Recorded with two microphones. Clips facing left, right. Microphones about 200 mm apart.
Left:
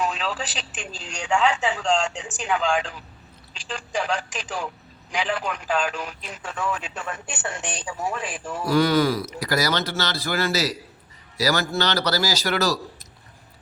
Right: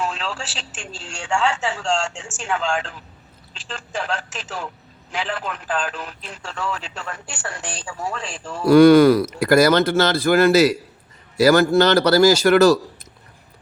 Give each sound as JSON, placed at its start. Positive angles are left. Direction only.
{"t": 0.0, "sound": "telephone", "side_deg": 15}
{"t": 1.1, "sound": "speech", "side_deg": 20}
{"t": 8.7, "sound": "speech", "side_deg": -55}